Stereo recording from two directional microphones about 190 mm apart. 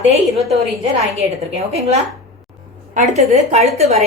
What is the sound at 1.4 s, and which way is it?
A woman's voice, 35° right (ahead or behind).